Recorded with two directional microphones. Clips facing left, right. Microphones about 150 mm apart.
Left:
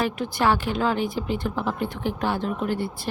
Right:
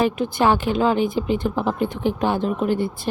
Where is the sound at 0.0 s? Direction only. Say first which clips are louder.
Right 4 dB; 20° right (ahead or behind).